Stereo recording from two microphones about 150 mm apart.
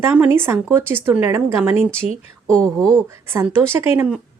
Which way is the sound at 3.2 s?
15° right (ahead or behind).